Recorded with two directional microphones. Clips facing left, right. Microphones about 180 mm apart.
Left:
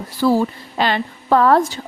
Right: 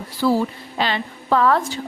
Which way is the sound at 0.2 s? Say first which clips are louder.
Left 3 dB; 45° left (ahead or behind).